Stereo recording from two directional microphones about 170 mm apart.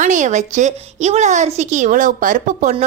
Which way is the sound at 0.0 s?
45° right (ahead or behind).